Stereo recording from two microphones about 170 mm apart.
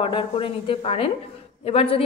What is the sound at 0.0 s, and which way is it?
A woman's voice, 30° left (ahead or behind).